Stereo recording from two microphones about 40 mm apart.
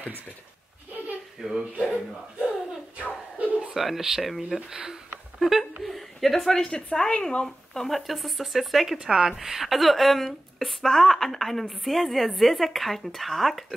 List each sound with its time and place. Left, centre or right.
1.4 s speech: centre
3.0 s a sound: right
3.7 s speech: centre
4.6 s speech: centre
5.4 s a sound: centre
6.6 s a woman's voice: left
7.4 s a woman's voice: centre
9.0 s a woman's voice: centre